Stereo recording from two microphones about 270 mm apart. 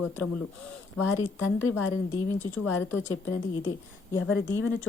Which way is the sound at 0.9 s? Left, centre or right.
Left.